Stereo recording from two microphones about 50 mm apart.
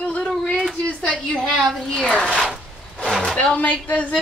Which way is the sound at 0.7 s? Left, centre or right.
Left.